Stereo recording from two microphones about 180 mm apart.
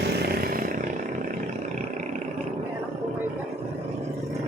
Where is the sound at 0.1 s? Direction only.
55° right (ahead or behind).